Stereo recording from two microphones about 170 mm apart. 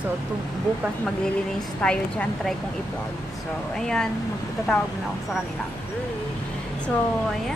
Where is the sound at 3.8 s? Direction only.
5° left (ahead or behind).